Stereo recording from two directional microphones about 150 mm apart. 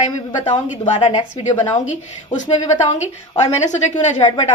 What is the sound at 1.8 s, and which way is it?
A woman's voice, 55° left (ahead or behind).